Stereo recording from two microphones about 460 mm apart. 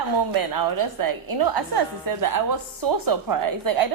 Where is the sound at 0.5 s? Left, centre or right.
Right.